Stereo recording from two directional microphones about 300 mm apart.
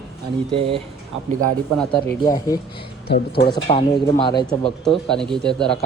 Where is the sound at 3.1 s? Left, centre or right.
Left.